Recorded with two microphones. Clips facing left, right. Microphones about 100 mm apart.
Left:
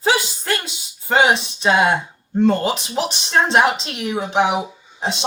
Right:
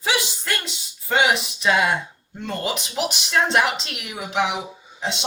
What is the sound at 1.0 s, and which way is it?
A woman's voice, 30° left (ahead or behind).